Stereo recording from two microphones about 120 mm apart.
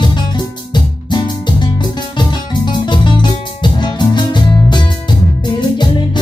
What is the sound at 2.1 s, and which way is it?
Music, 40° left (ahead or behind).